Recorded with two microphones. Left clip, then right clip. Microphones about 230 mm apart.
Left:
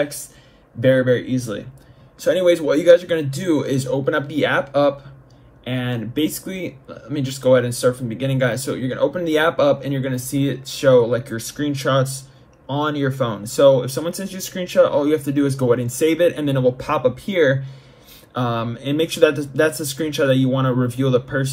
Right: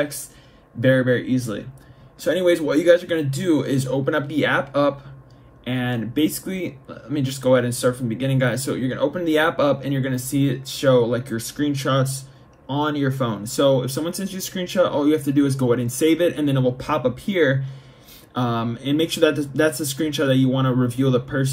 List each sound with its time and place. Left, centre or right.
0.7 s speech: centre
5.6 s speech: left
6.1 s speech: centre